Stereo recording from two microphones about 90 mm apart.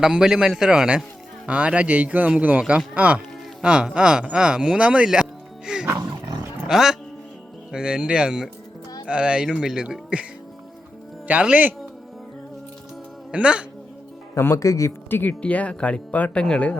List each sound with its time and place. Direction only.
0.0 s a man's voice: 10° right (ahead or behind)
11.3 s a man's voice: 15° right (ahead or behind)
13.3 s a man's voice: 10° right (ahead or behind)
14.3 s speech: 30° left (ahead or behind)
15.1 s speech: 20° left (ahead or behind)